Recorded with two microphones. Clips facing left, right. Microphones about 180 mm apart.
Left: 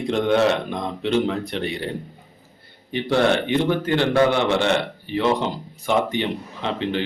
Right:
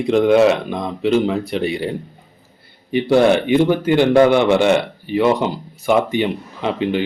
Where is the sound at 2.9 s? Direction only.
10° right (ahead or behind).